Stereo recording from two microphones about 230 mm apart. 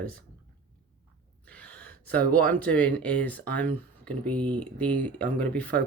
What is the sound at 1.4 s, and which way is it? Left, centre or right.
Gasp, centre.